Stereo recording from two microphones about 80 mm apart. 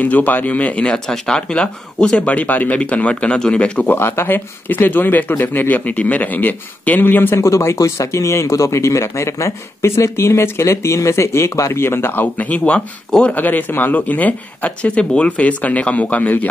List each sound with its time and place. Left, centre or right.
0.0 s speech: left
7.4 s speech: left; by 16.4 s centre